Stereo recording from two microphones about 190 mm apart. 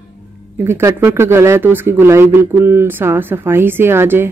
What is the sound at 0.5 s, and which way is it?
Speech, 15° right (ahead or behind).